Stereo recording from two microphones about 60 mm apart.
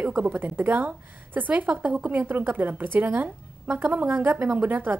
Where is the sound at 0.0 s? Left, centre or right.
Right.